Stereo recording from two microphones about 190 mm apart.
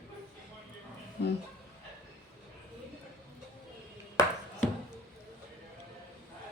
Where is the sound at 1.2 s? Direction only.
60° left (ahead or behind).